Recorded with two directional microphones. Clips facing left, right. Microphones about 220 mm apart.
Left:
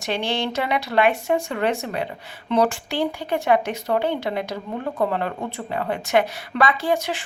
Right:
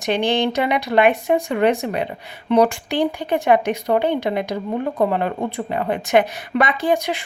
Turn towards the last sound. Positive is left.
turn(degrees=-15)  # may be behind; listen again after turning